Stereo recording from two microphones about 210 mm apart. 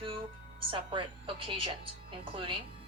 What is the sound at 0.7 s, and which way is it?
A woman's voice, 25° right (ahead or behind).